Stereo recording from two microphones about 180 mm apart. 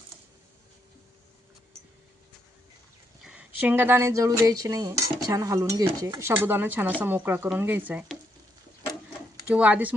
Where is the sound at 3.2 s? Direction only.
5° right (ahead or behind).